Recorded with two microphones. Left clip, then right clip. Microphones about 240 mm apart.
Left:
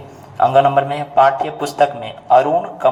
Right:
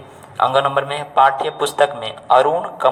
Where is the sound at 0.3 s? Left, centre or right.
Right.